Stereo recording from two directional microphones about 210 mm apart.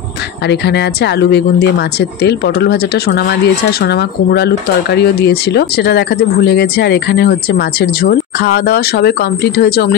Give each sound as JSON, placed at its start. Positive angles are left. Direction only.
{"t": 0.5, "sound": "speech", "side_deg": 55}